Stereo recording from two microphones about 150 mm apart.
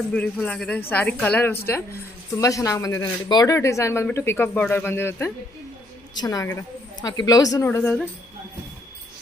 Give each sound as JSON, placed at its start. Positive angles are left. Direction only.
{"t": 0.1, "sound": "a woman's voice", "side_deg": 10}